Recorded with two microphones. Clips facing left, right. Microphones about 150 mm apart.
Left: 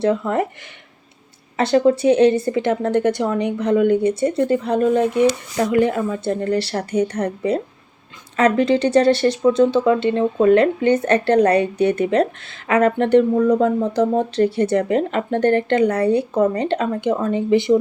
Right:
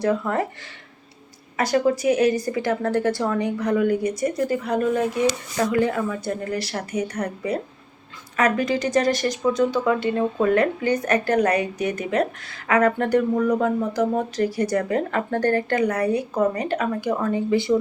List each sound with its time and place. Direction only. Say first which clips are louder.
0.0 s speech: left 3 dB; 20° left (ahead or behind)
1.5 s speech: left 5 dB; 30° left (ahead or behind)